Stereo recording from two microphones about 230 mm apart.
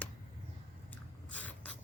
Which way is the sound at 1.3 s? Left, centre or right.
Centre.